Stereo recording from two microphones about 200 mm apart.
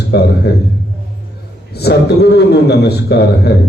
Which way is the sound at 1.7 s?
55° left (ahead or behind).